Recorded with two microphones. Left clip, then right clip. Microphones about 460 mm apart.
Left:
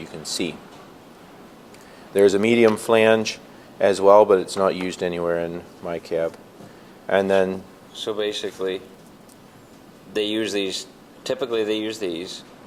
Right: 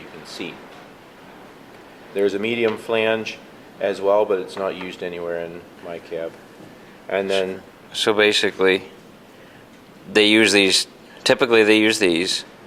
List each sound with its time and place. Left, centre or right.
0.3 s speech: left
2.1 s speech: left
7.9 s speech: right
10.1 s speech: right